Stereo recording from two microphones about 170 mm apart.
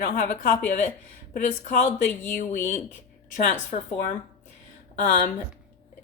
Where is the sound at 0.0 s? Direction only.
50° left (ahead or behind).